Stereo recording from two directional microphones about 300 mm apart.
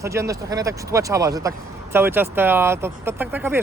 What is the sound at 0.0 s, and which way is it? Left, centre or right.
Speech, centre.